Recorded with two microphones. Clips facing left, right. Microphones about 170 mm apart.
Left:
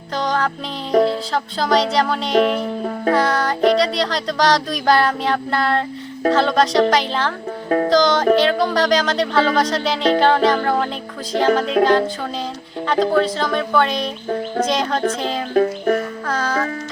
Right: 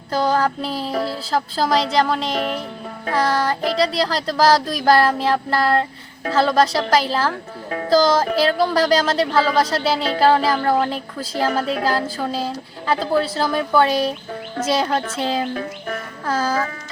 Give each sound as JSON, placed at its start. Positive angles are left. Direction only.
{"t": 0.1, "sound": "music", "side_deg": -5}
{"t": 1.3, "sound": "child singing", "side_deg": -5}
{"t": 15.5, "sound": "music", "side_deg": 45}
{"t": 16.2, "sound": "child singing", "side_deg": -5}